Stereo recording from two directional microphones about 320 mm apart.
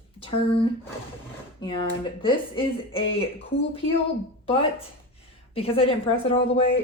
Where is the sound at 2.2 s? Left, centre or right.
Centre.